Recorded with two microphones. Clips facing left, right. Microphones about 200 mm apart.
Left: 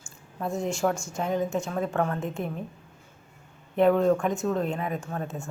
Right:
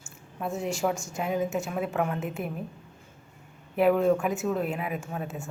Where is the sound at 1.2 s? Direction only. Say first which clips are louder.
Left 1 dB; 5° right (ahead or behind).